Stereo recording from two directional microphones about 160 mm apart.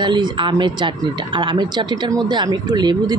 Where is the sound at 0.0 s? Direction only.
30° right (ahead or behind).